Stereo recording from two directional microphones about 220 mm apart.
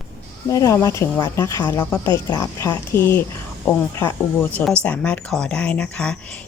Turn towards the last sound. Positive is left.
turn(degrees=5)  # may be behind; listen again after turning